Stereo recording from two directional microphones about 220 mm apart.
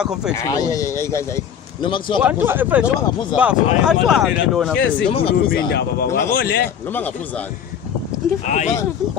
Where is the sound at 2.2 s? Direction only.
10° right (ahead or behind).